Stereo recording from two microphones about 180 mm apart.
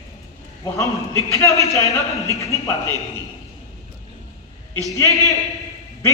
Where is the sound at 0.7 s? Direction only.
15° left (ahead or behind).